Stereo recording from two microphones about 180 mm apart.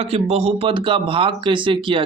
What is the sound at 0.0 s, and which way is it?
Speech, 35° right (ahead or behind).